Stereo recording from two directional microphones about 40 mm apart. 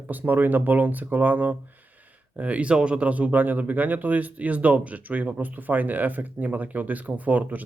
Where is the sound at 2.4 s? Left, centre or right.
Right.